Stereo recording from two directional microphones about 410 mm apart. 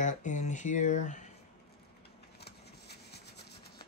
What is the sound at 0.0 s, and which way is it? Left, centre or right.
Speech, centre.